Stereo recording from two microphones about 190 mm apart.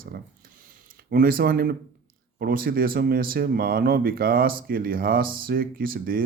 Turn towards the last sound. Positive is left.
turn(degrees=-50)  # may be behind; listen again after turning